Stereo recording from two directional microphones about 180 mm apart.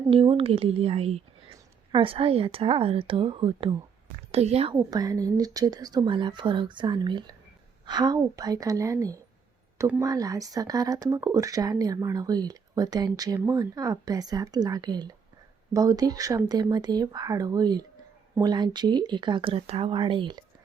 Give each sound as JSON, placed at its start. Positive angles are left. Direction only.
{"t": 0.1, "sound": "a woman's voice", "side_deg": -30}
{"t": 4.7, "sound": "speech", "side_deg": -20}